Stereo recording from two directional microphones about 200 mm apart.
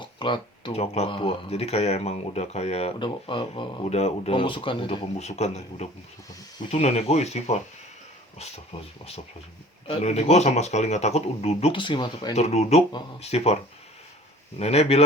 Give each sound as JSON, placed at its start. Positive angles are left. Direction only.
{"t": 0.0, "sound": "speech", "side_deg": 25}
{"t": 9.8, "sound": "speech", "side_deg": 30}
{"t": 12.3, "sound": "speech", "side_deg": 35}
{"t": 14.6, "sound": "speech", "side_deg": 30}